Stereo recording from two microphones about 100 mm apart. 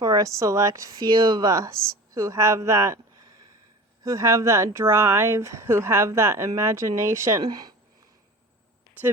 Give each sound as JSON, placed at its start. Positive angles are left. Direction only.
{"t": 0.0, "sound": "speech", "side_deg": -35}
{"t": 4.0, "sound": "speech", "side_deg": -30}
{"t": 7.4, "sound": "speech", "side_deg": -40}